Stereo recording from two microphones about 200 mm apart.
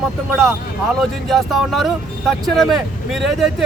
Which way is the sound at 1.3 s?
Centre (ahead or behind).